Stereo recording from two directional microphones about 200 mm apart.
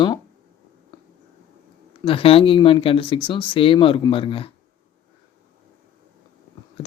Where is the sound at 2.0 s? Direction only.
25° left (ahead or behind).